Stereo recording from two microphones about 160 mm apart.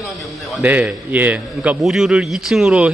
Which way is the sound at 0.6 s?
10° right (ahead or behind).